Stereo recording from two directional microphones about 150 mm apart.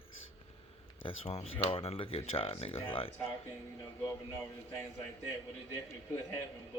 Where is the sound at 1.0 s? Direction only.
40° left (ahead or behind).